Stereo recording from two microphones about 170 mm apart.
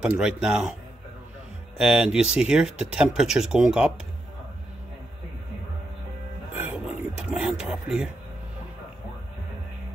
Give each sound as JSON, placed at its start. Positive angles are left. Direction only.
{"t": 0.0, "sound": "speech", "side_deg": -5}
{"t": 1.8, "sound": "speech", "side_deg": -5}
{"t": 6.6, "sound": "a sound", "side_deg": -5}